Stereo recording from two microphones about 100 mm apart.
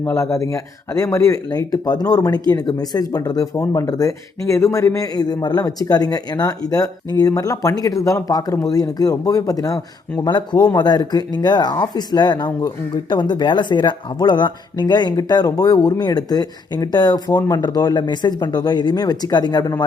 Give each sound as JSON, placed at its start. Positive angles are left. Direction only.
{"t": 0.0, "sound": "speech", "side_deg": 30}
{"t": 10.2, "sound": "speech", "side_deg": 45}